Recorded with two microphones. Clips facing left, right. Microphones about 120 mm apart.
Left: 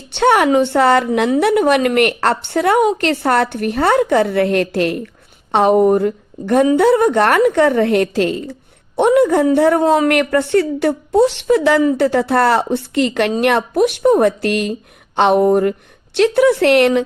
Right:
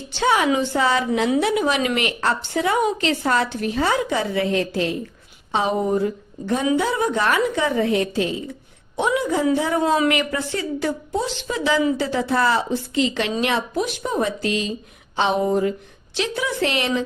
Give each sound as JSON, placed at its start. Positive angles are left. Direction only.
{"t": 0.1, "sound": "a woman's voice", "side_deg": 65}
{"t": 9.0, "sound": "a woman's voice", "side_deg": 60}